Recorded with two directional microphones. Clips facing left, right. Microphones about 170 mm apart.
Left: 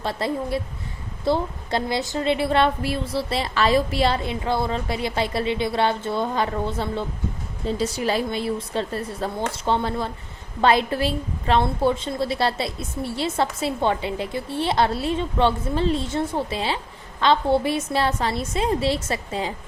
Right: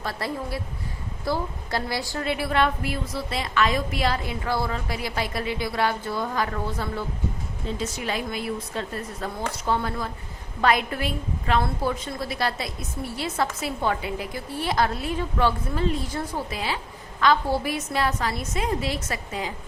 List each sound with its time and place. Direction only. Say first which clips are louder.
0.0 s a woman's voice: left 5 dB; 25° left (ahead or behind)